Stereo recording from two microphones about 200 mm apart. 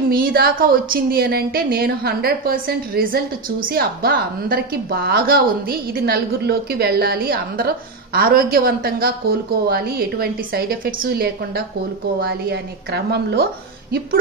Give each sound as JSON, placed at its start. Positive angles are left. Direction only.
{"t": 0.1, "sound": "a woman's voice", "side_deg": -50}